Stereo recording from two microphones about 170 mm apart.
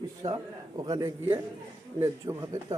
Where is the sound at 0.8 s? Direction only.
20° right (ahead or behind).